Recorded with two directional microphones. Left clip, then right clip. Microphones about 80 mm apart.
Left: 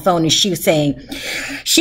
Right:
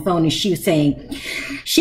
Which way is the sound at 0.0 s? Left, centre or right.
Left.